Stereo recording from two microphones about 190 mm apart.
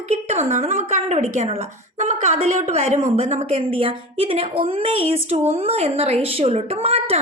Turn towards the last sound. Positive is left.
turn(degrees=-30)  # may be behind; listen again after turning